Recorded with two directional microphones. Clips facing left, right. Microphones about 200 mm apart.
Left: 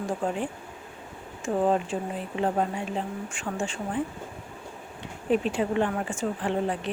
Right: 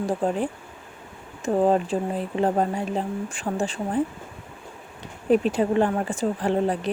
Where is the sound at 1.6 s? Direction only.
35° right (ahead or behind).